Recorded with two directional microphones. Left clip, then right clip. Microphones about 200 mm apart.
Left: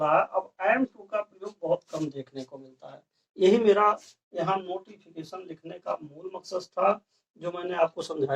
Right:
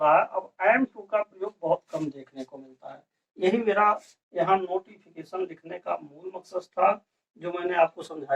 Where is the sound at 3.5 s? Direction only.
25° left (ahead or behind).